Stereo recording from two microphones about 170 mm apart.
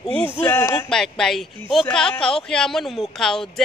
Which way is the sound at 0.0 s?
10° left (ahead or behind).